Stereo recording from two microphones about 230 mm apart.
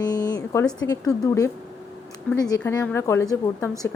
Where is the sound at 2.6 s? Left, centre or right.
Centre.